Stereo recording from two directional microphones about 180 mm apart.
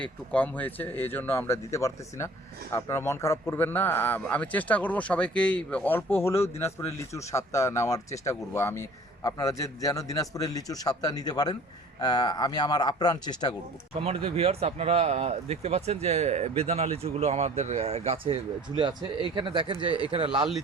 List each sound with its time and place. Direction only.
0.0 s speech: 10° left (ahead or behind); by 13.6 s 25° left (ahead or behind)
13.9 s speech: 30° right (ahead or behind)